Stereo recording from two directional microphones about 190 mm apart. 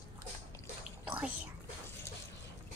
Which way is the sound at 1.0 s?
5° right (ahead or behind).